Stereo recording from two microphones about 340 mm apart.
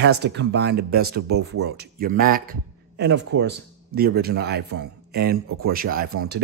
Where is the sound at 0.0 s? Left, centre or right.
Right.